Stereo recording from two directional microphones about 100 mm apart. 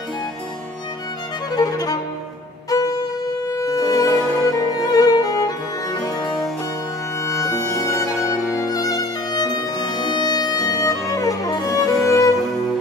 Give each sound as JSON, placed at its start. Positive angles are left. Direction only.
{"t": 1.5, "sound": "violin", "side_deg": 40}
{"t": 2.7, "sound": "music", "side_deg": 40}